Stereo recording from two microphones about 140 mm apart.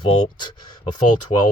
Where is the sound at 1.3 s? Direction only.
45° left (ahead or behind).